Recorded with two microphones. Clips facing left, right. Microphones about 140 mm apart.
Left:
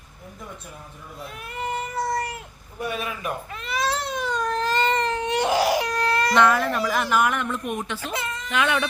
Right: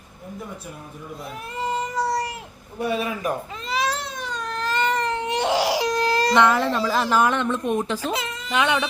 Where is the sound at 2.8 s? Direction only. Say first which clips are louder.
Right 5 dB; 30° right (ahead or behind).